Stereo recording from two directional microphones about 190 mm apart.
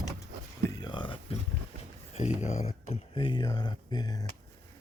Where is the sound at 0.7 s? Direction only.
20° left (ahead or behind).